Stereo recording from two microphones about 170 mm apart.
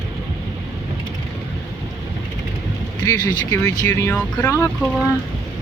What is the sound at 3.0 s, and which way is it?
Speech, 20° left (ahead or behind).